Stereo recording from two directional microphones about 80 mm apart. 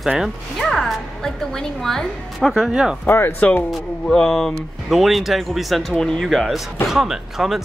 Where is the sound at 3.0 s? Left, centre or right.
Left.